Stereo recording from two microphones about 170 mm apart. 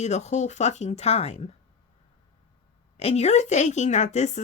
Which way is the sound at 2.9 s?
40° left (ahead or behind).